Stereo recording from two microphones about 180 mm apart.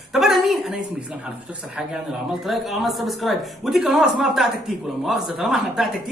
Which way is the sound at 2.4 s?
Centre (ahead or behind).